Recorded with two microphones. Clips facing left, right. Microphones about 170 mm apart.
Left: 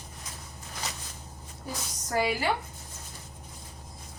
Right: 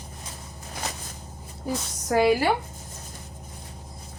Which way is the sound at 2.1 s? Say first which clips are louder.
Right 8 dB; 65° right (ahead or behind).